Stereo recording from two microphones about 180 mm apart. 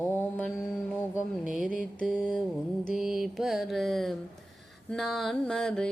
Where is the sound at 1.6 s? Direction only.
50° right (ahead or behind).